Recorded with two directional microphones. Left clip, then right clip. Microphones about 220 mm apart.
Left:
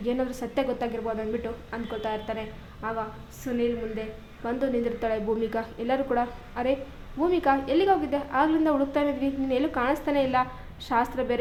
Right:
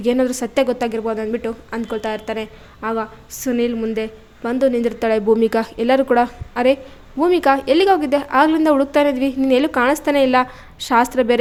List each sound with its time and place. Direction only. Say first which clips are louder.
0.0 s a woman's voice: right 11 dB; 50° right (ahead or behind)